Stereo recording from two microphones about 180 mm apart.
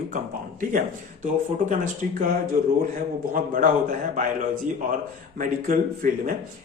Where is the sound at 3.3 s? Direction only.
50° right (ahead or behind).